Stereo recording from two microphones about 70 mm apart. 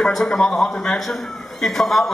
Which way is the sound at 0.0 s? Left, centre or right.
Centre.